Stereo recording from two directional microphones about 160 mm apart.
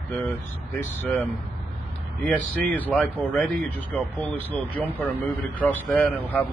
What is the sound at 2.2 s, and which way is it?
Speech, 10° left (ahead or behind).